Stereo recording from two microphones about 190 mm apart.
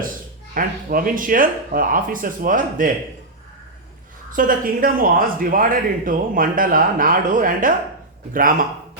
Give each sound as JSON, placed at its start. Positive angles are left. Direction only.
{"t": 0.5, "sound": "speech", "side_deg": -45}
{"t": 4.3, "sound": "speech", "side_deg": -45}